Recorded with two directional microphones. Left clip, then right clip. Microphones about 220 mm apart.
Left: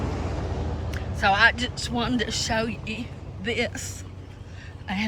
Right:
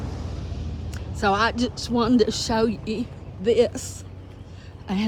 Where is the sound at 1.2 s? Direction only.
25° right (ahead or behind).